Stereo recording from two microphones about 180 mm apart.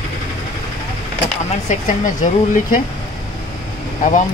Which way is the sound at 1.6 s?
45° left (ahead or behind).